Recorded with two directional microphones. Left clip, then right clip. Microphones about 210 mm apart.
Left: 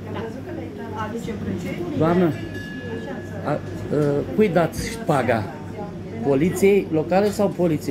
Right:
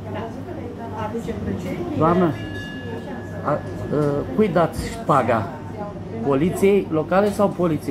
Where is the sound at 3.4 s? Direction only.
30° left (ahead or behind).